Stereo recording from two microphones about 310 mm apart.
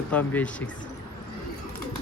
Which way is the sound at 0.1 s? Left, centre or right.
Centre.